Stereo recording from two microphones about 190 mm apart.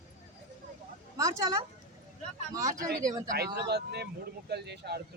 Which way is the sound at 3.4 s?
60° right (ahead or behind).